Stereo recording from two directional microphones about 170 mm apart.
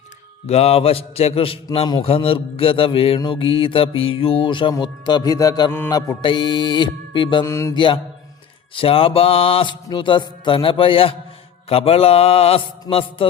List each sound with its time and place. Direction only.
0.4 s mantra: 35° left (ahead or behind)
3.2 s music: 30° left (ahead or behind)
7.4 s mantra: 15° left (ahead or behind)
8.7 s mantra: 30° left (ahead or behind)